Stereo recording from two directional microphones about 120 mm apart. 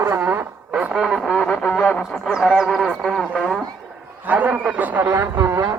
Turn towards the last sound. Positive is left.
turn(degrees=-25)  # may be behind; listen again after turning